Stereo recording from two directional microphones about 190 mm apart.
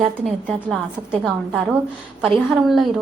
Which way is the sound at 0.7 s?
Centre (ahead or behind).